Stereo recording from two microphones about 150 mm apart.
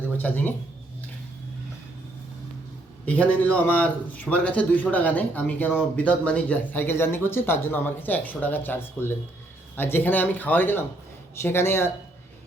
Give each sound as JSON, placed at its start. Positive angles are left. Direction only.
{"t": 0.2, "sound": "speech", "side_deg": 15}
{"t": 3.1, "sound": "speech", "side_deg": 10}